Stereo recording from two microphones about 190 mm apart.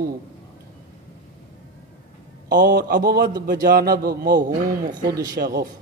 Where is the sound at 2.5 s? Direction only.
50° right (ahead or behind).